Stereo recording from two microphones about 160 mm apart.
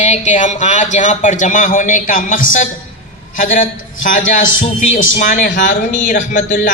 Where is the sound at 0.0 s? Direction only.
50° left (ahead or behind).